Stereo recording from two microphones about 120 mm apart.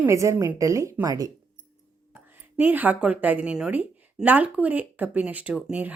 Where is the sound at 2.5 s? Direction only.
15° right (ahead or behind).